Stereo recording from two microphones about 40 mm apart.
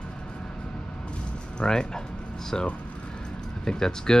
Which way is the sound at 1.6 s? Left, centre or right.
Centre.